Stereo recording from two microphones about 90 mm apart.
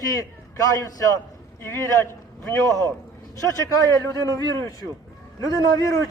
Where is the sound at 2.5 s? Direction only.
40° left (ahead or behind).